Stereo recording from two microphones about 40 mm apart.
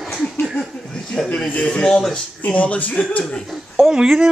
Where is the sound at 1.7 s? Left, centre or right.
Left.